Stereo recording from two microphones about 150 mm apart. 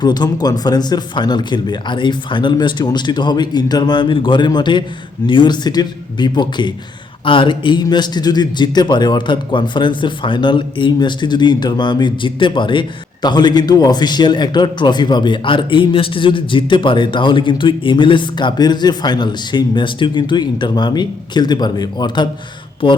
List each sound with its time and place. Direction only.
0.0 s a man's voice: 30° left (ahead or behind)